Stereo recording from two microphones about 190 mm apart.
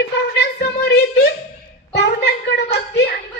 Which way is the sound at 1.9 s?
60° left (ahead or behind).